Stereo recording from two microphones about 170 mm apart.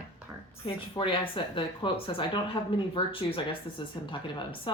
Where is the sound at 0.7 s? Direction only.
30° left (ahead or behind).